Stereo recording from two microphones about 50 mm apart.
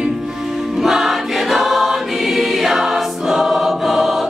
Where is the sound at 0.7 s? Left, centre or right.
Centre.